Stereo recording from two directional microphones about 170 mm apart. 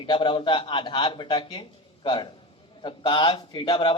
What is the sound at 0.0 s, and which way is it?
A man's voice, 30° left (ahead or behind).